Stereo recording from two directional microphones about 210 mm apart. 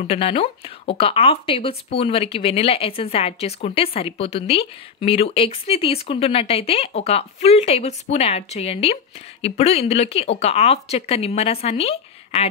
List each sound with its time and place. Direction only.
0.0 s speech: 30° left (ahead or behind)